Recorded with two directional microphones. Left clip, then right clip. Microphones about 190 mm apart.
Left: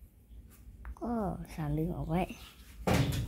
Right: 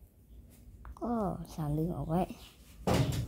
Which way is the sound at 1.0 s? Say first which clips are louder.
Right 1 dB; 5° left (ahead or behind).